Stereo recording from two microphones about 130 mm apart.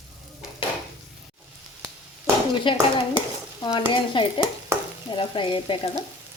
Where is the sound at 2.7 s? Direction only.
40° left (ahead or behind).